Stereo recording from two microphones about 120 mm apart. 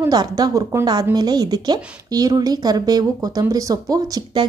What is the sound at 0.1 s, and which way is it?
A woman's voice, 35° right (ahead or behind).